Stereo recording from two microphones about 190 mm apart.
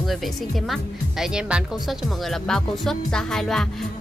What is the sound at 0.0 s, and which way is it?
Speech, centre (ahead or behind).